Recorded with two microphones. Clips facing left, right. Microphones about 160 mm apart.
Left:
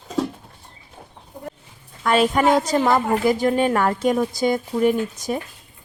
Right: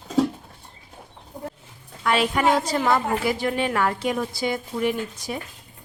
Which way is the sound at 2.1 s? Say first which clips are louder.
Left 4 dB; 45° left (ahead or behind).